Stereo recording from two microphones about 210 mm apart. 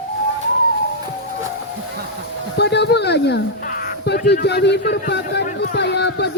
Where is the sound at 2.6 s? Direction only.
55° left (ahead or behind).